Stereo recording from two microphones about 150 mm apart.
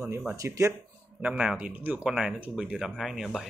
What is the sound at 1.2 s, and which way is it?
Speech, 5° right (ahead or behind).